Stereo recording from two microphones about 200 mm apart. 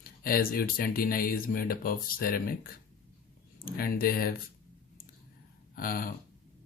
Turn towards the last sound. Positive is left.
turn(degrees=45)  # may be behind; listen again after turning